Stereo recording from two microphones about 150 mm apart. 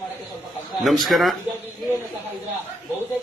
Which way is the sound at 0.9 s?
Centre (ahead or behind).